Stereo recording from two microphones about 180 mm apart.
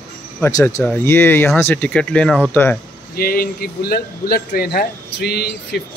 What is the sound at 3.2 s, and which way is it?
Speech, 55° left (ahead or behind).